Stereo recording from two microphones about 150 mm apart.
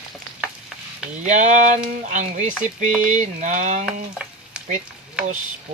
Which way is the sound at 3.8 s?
5° right (ahead or behind).